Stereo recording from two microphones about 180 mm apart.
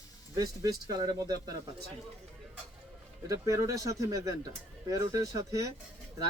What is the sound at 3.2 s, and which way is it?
Speech, 20° right (ahead or behind).